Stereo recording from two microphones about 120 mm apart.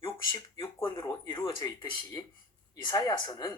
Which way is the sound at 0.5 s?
25° left (ahead or behind).